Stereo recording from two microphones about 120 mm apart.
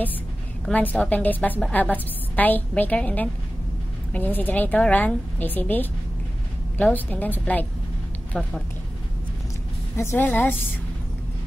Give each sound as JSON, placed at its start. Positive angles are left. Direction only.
{"t": 0.7, "sound": "a woman's voice", "side_deg": 10}
{"t": 9.9, "sound": "a woman's voice", "side_deg": 20}